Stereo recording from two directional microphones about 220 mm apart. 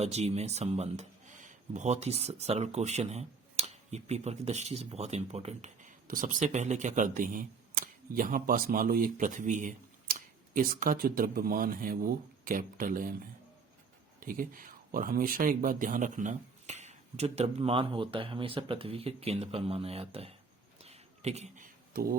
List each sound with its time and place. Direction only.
0.0 s speech: 30° right (ahead or behind)
14.2 s speech: 40° right (ahead or behind)
20.8 s a sound: 30° right (ahead or behind)